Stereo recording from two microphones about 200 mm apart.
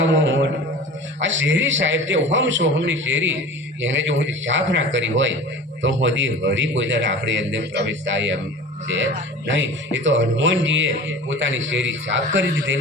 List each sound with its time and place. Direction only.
0.0 s a man's voice: 65° right (ahead or behind)
9.5 s a man's voice: 70° right (ahead or behind)